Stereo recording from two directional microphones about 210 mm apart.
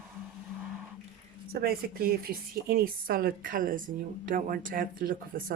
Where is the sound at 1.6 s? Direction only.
45° right (ahead or behind).